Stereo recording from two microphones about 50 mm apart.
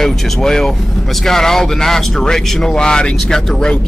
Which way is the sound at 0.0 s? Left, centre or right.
Centre.